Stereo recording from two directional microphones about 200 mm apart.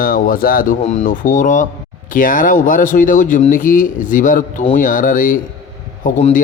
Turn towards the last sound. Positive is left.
turn(degrees=40)  # may be behind; listen again after turning